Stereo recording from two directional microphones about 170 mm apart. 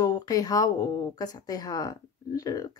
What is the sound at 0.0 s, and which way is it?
Speech, 20° left (ahead or behind).